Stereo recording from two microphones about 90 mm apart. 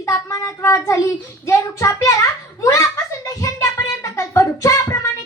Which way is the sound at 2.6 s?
35° left (ahead or behind).